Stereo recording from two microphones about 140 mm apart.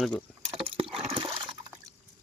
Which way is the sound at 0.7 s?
40° right (ahead or behind).